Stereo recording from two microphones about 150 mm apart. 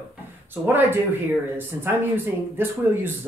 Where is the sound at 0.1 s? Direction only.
15° right (ahead or behind).